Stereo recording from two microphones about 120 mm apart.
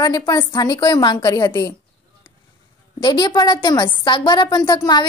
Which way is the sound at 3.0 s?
35° left (ahead or behind).